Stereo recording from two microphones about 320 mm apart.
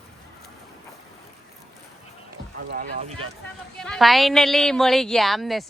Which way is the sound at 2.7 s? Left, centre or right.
Right.